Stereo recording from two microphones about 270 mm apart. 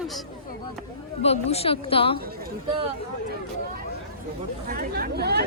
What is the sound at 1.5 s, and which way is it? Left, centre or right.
Speech, left.